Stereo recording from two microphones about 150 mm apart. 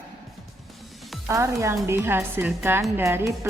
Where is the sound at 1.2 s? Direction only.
20° right (ahead or behind).